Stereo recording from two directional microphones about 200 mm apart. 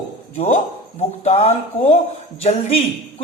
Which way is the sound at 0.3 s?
35° left (ahead or behind).